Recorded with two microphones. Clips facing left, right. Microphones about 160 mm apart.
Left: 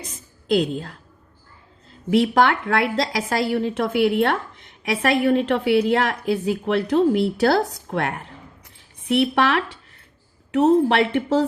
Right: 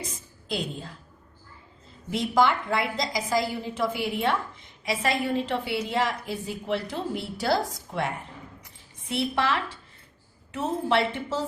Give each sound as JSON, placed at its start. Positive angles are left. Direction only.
{"t": 0.5, "sound": "a woman's voice", "side_deg": 65}
{"t": 2.0, "sound": "a woman's voice", "side_deg": 70}